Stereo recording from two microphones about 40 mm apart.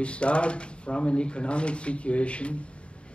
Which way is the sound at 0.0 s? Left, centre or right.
Left.